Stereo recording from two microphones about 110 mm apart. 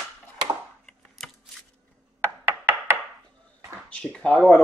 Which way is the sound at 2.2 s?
20° right (ahead or behind).